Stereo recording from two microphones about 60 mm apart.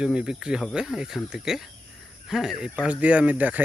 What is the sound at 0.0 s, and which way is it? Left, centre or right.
Speech, centre.